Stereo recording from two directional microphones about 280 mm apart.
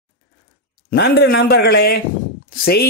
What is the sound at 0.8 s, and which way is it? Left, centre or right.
Speech, left.